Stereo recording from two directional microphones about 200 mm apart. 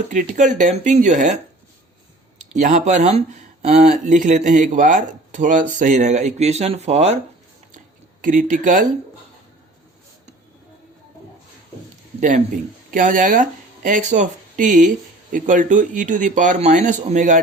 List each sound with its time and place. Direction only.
0.1 s speech: 40° right (ahead or behind)
2.6 s speech: 35° right (ahead or behind)
8.2 s speech: 40° right (ahead or behind)
12.2 s speech: 40° right (ahead or behind)